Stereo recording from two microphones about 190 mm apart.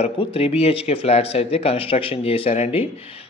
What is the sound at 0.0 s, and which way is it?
A man's voice, 30° left (ahead or behind).